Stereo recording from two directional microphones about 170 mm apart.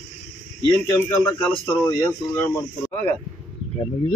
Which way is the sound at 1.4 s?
10° left (ahead or behind).